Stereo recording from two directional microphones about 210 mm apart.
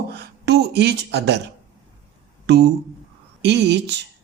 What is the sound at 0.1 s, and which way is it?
Speech, 50° right (ahead or behind).